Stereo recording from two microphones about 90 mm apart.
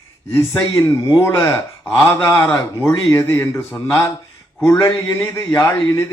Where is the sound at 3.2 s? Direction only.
25° left (ahead or behind).